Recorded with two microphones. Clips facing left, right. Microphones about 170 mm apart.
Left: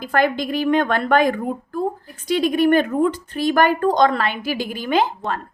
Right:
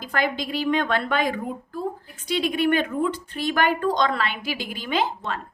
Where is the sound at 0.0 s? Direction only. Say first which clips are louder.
Left 6 dB; 55° left (ahead or behind).